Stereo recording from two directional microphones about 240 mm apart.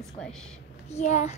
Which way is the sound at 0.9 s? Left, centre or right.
Left.